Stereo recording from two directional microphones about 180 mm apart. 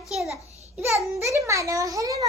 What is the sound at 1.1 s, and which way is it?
A child's voice, 15° right (ahead or behind).